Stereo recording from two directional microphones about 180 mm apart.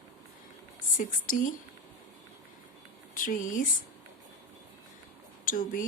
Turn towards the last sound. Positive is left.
turn(degrees=50)  # may be behind; listen again after turning